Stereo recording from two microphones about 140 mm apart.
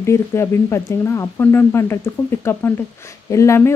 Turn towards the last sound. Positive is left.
turn(degrees=20)  # may be behind; listen again after turning